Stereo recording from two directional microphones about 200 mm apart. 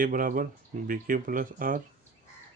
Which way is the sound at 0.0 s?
45° right (ahead or behind).